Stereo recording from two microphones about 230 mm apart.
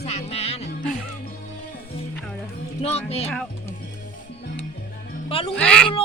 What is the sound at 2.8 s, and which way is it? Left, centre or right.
Music, left.